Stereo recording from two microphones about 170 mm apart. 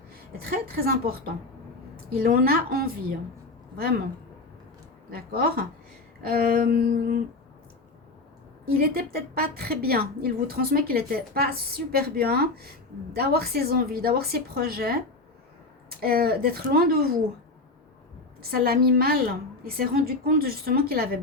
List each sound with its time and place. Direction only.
0.1 s a woman's voice: 60° right (ahead or behind)
5.1 s a woman's voice: 60° right (ahead or behind)
8.6 s a woman's voice: 60° right (ahead or behind)
18.5 s a woman's voice: 65° right (ahead or behind)